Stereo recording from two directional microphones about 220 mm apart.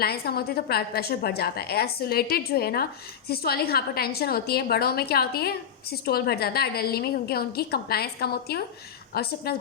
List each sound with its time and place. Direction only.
0.0 s a woman's voice: 45° left (ahead or behind)